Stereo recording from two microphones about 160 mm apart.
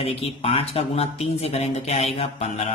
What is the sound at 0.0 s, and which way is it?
Speech, 40° left (ahead or behind).